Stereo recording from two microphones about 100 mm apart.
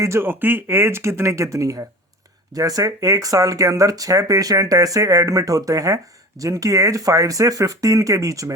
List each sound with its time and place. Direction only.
0.0 s speech: 25° right (ahead or behind)